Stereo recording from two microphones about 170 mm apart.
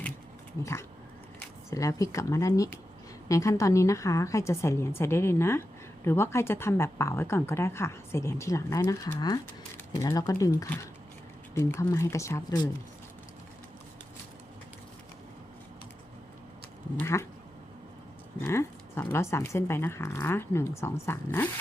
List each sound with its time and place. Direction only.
0.6 s speech: 15° left (ahead or behind)
17.0 s speech: 15° left (ahead or behind)
18.3 s speech: 15° left (ahead or behind)